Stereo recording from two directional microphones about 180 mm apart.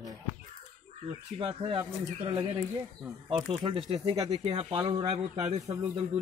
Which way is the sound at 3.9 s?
35° right (ahead or behind).